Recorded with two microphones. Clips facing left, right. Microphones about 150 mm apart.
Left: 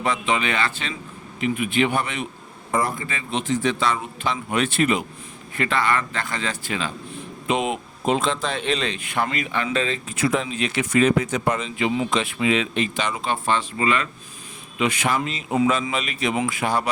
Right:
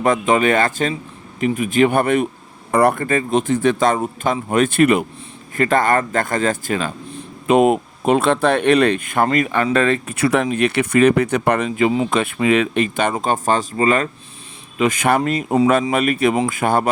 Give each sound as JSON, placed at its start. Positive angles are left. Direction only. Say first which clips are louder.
{"t": 0.0, "sound": "speech", "louder": "right 8 dB", "side_deg": -50}
{"t": 5.5, "sound": "speech", "louder": "right 6 dB", "side_deg": -45}